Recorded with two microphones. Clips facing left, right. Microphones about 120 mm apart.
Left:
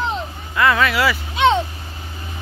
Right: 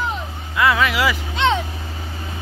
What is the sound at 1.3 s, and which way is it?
Vehicle, 15° left (ahead or behind).